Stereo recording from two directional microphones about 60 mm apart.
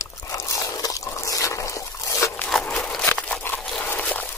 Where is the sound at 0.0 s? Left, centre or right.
Left.